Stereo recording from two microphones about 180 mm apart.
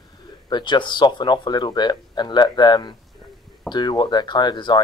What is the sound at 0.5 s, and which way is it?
Speech, 25° left (ahead or behind).